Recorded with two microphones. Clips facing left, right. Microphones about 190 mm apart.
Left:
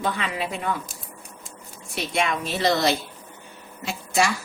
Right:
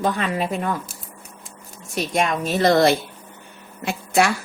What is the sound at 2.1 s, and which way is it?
A woman's voice, 45° right (ahead or behind).